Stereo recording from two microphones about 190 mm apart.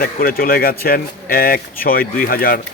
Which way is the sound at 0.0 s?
50° left (ahead or behind).